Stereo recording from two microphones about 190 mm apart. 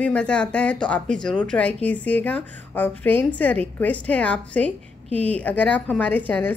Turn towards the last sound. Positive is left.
turn(degrees=10)  # may be behind; listen again after turning